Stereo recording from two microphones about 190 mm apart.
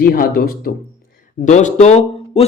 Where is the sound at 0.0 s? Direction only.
50° left (ahead or behind).